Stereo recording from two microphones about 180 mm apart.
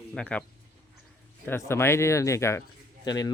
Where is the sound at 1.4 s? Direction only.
15° left (ahead or behind).